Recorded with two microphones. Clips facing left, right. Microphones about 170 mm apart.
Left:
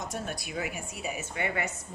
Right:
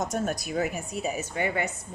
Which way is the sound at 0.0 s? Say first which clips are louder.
Right 7 dB; 45° right (ahead or behind).